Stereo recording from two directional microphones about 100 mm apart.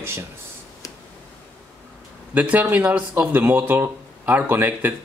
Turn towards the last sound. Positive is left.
turn(degrees=-20)  # may be behind; listen again after turning